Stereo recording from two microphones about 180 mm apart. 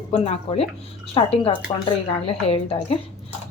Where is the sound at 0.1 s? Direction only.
35° left (ahead or behind).